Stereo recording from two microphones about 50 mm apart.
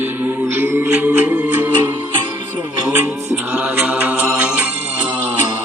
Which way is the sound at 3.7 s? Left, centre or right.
Right.